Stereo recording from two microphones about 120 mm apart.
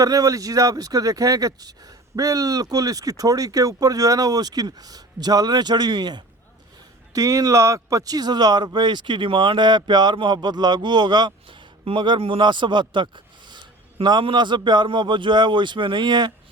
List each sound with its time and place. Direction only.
0.0 s speech: 30° right (ahead or behind)